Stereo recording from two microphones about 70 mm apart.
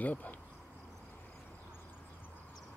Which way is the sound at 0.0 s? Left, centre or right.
Left.